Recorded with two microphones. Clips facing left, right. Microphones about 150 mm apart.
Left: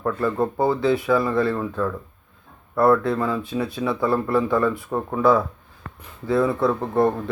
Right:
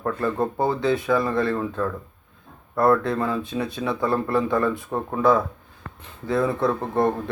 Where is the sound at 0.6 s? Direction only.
20° right (ahead or behind).